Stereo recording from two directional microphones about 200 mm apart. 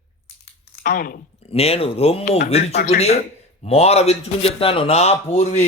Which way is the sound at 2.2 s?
50° left (ahead or behind).